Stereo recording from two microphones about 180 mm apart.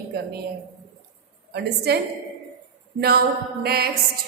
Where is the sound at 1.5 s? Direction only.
65° right (ahead or behind).